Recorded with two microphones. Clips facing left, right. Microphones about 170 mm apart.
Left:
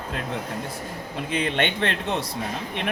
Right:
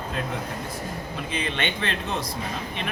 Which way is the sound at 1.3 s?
65° left (ahead or behind).